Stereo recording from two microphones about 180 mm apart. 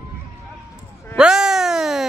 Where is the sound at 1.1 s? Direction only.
5° right (ahead or behind).